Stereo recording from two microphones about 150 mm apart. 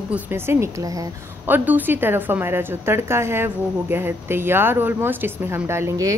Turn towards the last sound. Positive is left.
turn(degrees=-20)  # may be behind; listen again after turning